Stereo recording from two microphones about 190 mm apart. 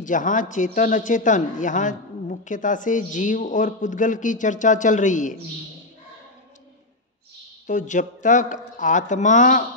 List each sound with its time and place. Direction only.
0.0 s a man's voice: 45° left (ahead or behind)
7.6 s speech: 40° left (ahead or behind)